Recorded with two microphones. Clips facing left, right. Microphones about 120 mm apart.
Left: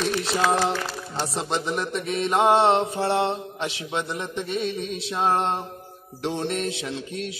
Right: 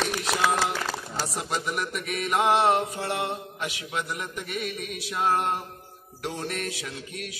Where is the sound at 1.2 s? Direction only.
25° left (ahead or behind).